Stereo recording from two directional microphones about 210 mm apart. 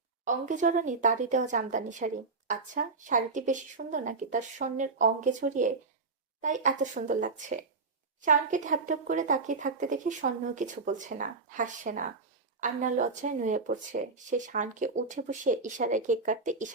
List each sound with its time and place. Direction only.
0.3 s a woman's voice: 35° right (ahead or behind)